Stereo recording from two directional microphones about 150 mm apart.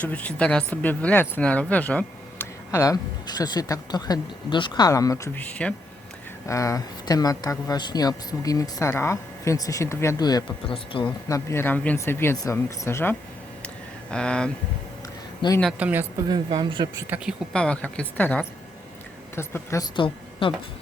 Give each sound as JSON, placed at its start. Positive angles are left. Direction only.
{"t": 0.0, "sound": "speech", "side_deg": 10}
{"t": 6.5, "sound": "a woman's voice", "side_deg": 20}
{"t": 11.3, "sound": "speech", "side_deg": 20}
{"t": 14.1, "sound": "speech", "side_deg": 5}
{"t": 15.4, "sound": "speech", "side_deg": 30}
{"t": 15.8, "sound": "a woman's voice", "side_deg": -15}
{"t": 16.2, "sound": "speech", "side_deg": -30}
{"t": 17.5, "sound": "a woman's voice", "side_deg": 5}
{"t": 20.4, "sound": "speech", "side_deg": 40}